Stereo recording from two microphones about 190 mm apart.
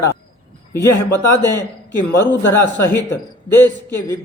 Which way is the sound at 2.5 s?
15° left (ahead or behind).